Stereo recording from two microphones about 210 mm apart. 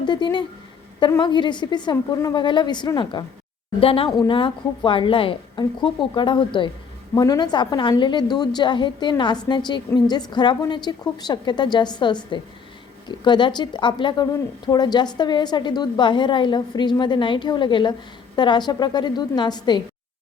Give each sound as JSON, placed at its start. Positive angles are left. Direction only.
{"t": 0.0, "sound": "a woman's voice", "side_deg": 20}